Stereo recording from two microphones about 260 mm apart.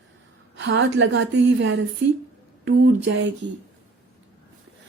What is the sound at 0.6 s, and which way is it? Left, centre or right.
A woman's voice, right.